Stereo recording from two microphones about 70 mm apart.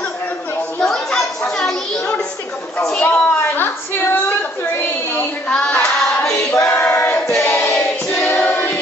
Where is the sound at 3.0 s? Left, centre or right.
Left.